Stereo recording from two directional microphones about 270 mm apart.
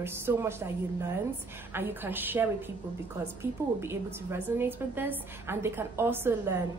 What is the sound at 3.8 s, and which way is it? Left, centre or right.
A woman's voice, centre.